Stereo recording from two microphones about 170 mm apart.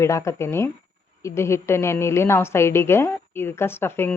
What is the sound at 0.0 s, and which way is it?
Speech, 15° left (ahead or behind).